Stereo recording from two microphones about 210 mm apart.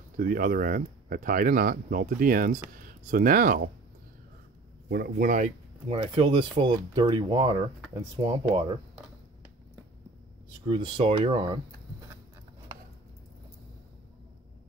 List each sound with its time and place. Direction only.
0.2 s speech: 40° right (ahead or behind)
4.8 s speech: 50° right (ahead or behind); by 8.7 s 20° right (ahead or behind)
10.7 s speech: 25° right (ahead or behind)